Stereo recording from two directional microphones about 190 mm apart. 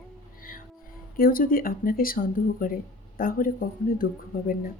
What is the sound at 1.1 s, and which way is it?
Speech, 50° left (ahead or behind).